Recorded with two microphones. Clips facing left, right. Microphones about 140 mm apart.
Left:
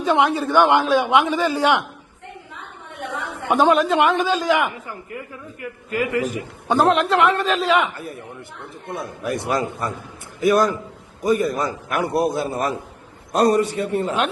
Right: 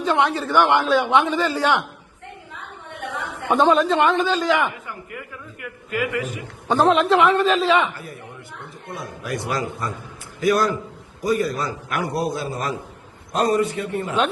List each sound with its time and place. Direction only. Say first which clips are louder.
0.0 s a man's voice: left 2 dB; 15° left (ahead or behind)
3.5 s a man's voice: left 1 dB; 5° left (ahead or behind)
4.9 s a man's voice: left 2 dB; 30° left (ahead or behind)
6.7 s a man's voice: right 1 dB; centre (ahead or behind)
7.9 s a man's voice: left 3 dB; 25° left (ahead or behind)
11.3 s a man's voice: left 2 dB; 20° left (ahead or behind)
13.3 s a man's voice: left 3 dB; 35° left (ahead or behind)